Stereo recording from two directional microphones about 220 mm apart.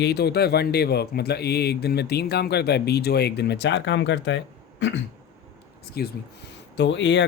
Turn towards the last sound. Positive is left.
turn(degrees=55)  # may be behind; listen again after turning